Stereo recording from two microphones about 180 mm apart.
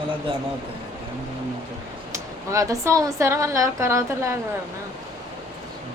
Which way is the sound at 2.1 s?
15° right (ahead or behind).